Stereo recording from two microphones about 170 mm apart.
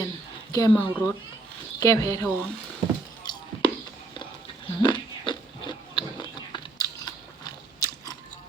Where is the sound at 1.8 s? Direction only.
20° left (ahead or behind).